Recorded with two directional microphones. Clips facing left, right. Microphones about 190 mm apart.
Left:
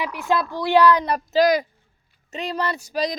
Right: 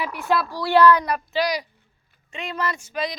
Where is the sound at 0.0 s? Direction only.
15° left (ahead or behind).